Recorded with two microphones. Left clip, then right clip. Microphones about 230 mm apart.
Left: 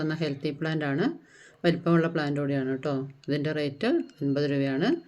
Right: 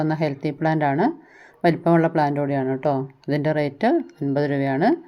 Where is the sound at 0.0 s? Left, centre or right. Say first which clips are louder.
Right 7 dB; centre.